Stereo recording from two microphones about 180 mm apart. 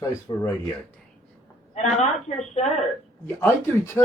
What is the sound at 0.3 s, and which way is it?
Speech, 25° left (ahead or behind).